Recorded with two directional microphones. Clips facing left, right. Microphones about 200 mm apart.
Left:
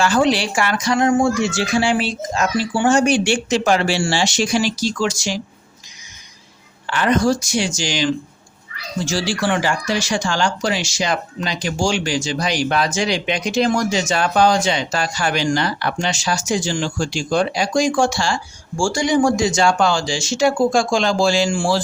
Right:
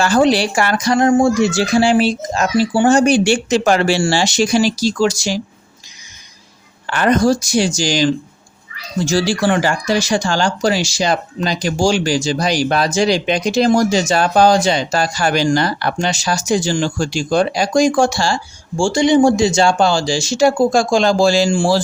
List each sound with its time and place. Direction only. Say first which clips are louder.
0.0 s speech: right 3 dB; 40° right (ahead or behind)
6.8 s speech: right 3 dB; 45° right (ahead or behind)
18.8 s speech: right 5 dB; 25° right (ahead or behind)